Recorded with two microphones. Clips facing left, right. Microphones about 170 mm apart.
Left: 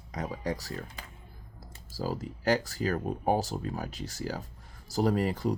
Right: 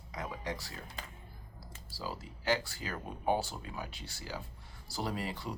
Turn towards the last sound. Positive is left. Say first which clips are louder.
# left 10 dB
turn(degrees=45)  # may be behind; listen again after turning